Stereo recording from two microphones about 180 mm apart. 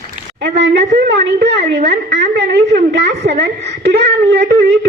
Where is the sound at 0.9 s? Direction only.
60° right (ahead or behind).